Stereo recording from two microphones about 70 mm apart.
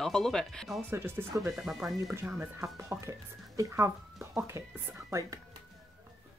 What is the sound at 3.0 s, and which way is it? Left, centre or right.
Speech, right.